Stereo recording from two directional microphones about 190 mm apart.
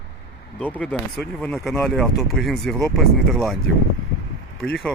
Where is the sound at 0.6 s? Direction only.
5° left (ahead or behind).